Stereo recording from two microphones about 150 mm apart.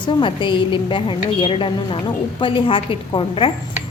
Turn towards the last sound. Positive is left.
turn(degrees=35)  # may be behind; listen again after turning